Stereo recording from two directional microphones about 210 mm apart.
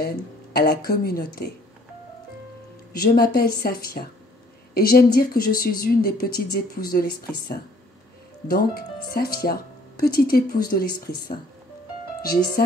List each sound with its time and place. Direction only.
0.0 s speech: 45° left (ahead or behind)
2.9 s speech: 45° left (ahead or behind)